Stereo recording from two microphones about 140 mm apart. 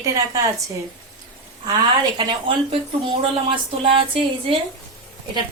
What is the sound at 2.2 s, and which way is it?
Speech, 35° right (ahead or behind).